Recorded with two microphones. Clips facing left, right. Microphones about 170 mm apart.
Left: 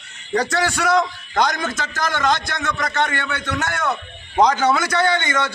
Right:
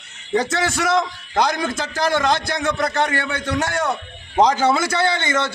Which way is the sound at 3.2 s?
10° right (ahead or behind).